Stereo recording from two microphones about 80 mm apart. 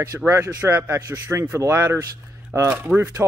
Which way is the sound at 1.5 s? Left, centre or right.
Right.